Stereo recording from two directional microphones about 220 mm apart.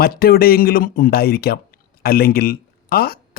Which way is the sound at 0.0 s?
45° left (ahead or behind).